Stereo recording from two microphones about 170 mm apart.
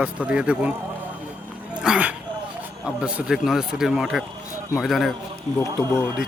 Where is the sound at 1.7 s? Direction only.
5° right (ahead or behind).